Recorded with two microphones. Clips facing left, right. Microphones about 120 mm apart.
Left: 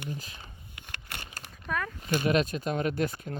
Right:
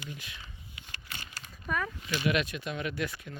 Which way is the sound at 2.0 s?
45° left (ahead or behind).